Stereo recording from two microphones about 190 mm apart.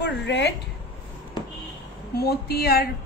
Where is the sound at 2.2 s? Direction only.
55° left (ahead or behind).